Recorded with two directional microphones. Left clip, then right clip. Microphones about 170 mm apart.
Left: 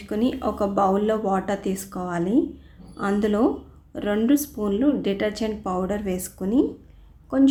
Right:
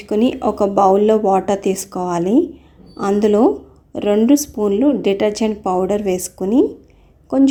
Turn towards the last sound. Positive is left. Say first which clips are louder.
# right 6 dB
turn(degrees=-25)  # may be behind; listen again after turning